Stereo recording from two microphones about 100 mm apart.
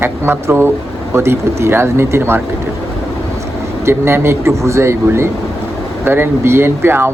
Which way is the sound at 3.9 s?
25° right (ahead or behind).